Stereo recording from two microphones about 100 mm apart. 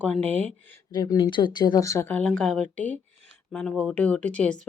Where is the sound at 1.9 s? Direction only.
25° left (ahead or behind).